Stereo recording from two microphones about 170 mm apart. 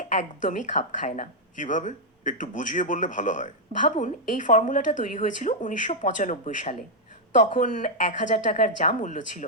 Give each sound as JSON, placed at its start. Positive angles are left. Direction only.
{"t": 0.0, "sound": "speech", "side_deg": 45}